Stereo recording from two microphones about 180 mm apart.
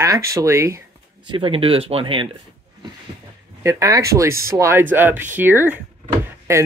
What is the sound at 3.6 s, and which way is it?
Speech, 15° right (ahead or behind).